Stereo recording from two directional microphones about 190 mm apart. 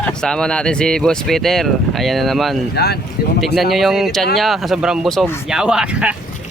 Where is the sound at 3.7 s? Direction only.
Centre (ahead or behind).